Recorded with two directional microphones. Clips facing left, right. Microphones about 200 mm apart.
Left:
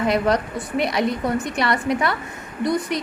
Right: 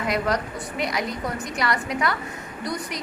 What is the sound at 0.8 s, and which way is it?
A woman's voice, 30° left (ahead or behind).